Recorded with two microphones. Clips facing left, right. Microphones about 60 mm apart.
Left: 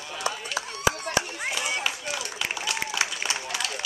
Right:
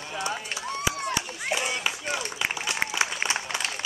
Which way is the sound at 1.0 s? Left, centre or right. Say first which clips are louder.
Left 2 dB; left.